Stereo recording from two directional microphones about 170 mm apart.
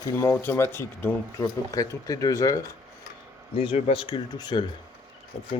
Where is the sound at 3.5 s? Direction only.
35° left (ahead or behind).